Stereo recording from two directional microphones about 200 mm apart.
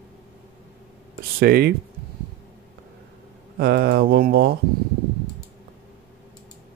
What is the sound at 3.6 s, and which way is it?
Speech, 50° right (ahead or behind).